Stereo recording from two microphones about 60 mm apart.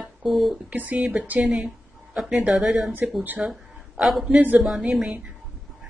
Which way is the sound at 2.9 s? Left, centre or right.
Right.